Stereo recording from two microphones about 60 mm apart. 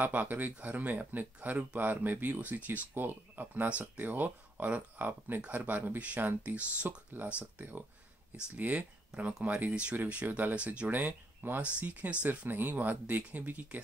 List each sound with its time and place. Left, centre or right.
0.0 s speech: right
10.5 s speech: centre
11.0 s speech: right